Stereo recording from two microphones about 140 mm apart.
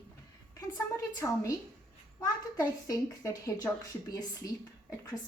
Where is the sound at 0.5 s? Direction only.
25° left (ahead or behind).